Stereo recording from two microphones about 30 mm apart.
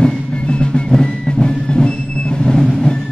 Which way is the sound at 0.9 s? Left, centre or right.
Left.